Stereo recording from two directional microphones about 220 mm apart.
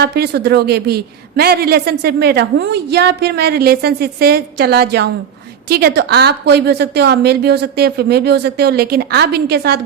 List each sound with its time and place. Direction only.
0.0 s a woman's voice: 45° right (ahead or behind)